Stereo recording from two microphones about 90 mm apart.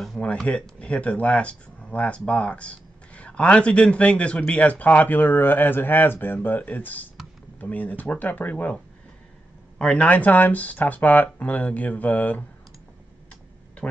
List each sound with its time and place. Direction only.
0.5 s a man's voice: 15° left (ahead or behind)
9.8 s speech: 10° left (ahead or behind)